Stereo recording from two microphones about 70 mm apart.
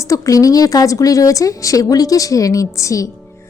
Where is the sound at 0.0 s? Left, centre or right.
Left.